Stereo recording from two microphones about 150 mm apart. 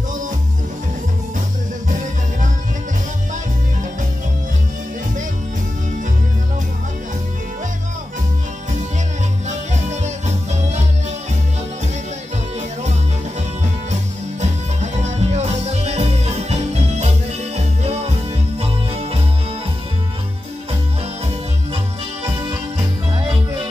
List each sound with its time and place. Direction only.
9.5 s music: 50° right (ahead or behind)
14.4 s music: 50° right (ahead or behind)
23.1 s music: 35° right (ahead or behind)